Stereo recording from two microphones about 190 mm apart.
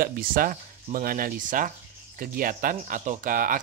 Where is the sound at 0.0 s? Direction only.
50° right (ahead or behind).